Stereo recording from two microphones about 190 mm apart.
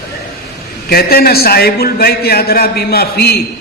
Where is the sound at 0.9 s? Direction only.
55° left (ahead or behind).